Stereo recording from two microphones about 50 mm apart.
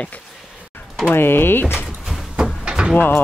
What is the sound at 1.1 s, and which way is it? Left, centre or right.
Speech, left.